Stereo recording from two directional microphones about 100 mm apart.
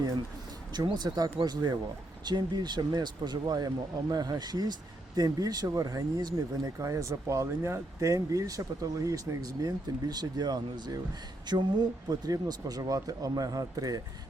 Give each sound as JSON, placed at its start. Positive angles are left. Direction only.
{"t": 0.7, "sound": "speech", "side_deg": -45}